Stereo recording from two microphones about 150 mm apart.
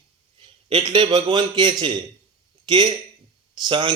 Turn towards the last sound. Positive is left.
turn(degrees=-30)  # may be behind; listen again after turning